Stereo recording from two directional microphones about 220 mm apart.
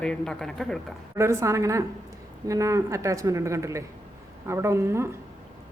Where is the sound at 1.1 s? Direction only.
10° right (ahead or behind).